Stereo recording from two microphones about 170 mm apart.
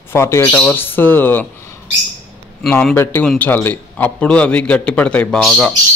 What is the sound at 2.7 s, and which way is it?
Speech, 10° left (ahead or behind).